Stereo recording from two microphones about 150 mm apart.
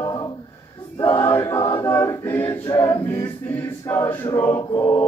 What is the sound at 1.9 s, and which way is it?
A capella, 20° left (ahead or behind).